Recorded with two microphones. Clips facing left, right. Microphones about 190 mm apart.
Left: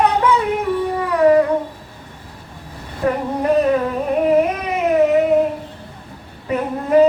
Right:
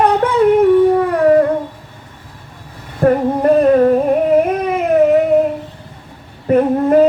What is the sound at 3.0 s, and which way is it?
Female singing, 50° right (ahead or behind).